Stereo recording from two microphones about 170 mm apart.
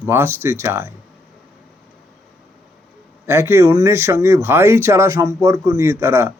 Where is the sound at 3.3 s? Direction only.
15° right (ahead or behind).